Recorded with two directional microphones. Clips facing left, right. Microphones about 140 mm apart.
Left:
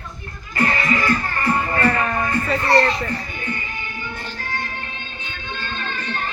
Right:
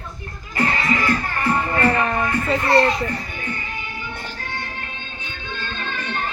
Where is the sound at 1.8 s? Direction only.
20° right (ahead or behind).